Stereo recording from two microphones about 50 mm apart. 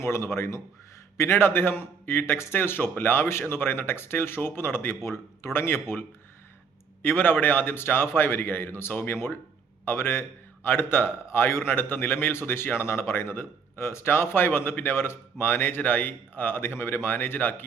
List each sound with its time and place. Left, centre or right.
0.0 s a man's voice: left
5.0 s a man's voice: left
5.5 s a man's voice: left
7.0 s a man's voice: left